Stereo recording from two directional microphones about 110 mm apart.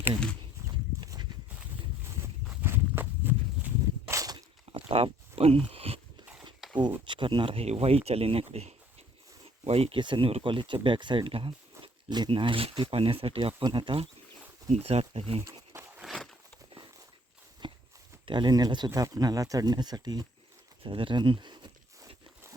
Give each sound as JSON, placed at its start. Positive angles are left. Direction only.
{"t": 0.7, "sound": "livestock", "side_deg": -40}
{"t": 2.0, "sound": "a sound", "side_deg": -25}
{"t": 2.6, "sound": "walk", "side_deg": -20}
{"t": 4.7, "sound": "a sound", "side_deg": -55}
{"t": 6.2, "sound": "a sound", "side_deg": -10}
{"t": 7.1, "sound": "speech", "side_deg": -50}
{"t": 10.0, "sound": "speech", "side_deg": -50}
{"t": 14.7, "sound": "speech", "side_deg": -75}
{"t": 15.7, "sound": "walk", "side_deg": -20}
{"t": 17.6, "sound": "walk", "side_deg": -45}
{"t": 18.3, "sound": "speech", "side_deg": -45}
{"t": 20.8, "sound": "a sound", "side_deg": -50}